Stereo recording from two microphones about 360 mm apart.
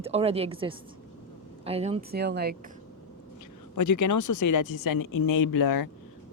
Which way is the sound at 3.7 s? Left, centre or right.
Left.